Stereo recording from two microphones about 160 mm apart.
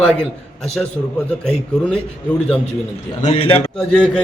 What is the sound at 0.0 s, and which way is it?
A man's voice, 5° left (ahead or behind).